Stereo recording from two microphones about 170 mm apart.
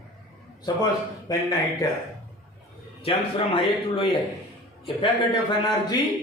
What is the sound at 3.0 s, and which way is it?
Speech, 30° left (ahead or behind).